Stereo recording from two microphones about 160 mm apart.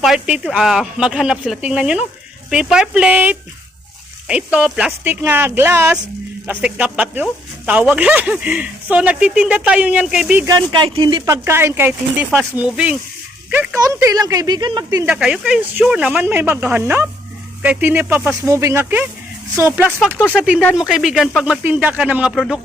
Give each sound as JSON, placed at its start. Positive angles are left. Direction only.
{"t": 0.0, "sound": "speech", "side_deg": -5}
{"t": 10.4, "sound": "a woman's voice", "side_deg": -25}
{"t": 13.8, "sound": "a woman's voice", "side_deg": -20}
{"t": 15.0, "sound": "speech", "side_deg": -10}